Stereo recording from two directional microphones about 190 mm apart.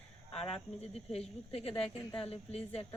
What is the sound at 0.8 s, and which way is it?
A woman's voice, 30° left (ahead or behind).